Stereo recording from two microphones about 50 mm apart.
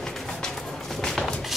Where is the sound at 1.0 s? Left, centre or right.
Centre.